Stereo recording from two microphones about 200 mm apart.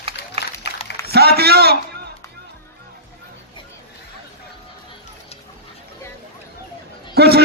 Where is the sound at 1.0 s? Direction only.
50° right (ahead or behind).